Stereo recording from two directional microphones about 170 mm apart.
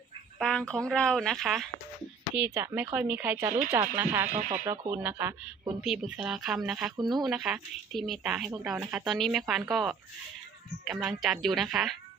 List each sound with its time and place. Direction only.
0.3 s a woman's voice: 5° left (ahead or behind)
6.9 s speech: 25° right (ahead or behind)
7.2 s a woman's voice: centre (ahead or behind)